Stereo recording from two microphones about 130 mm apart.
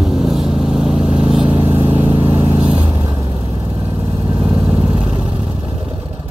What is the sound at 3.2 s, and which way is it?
Vehicle, 50° left (ahead or behind).